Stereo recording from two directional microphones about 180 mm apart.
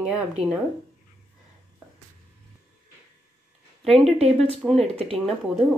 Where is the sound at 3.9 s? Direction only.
35° right (ahead or behind).